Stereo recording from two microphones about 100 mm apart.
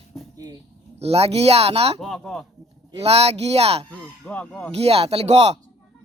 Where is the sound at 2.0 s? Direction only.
Centre (ahead or behind).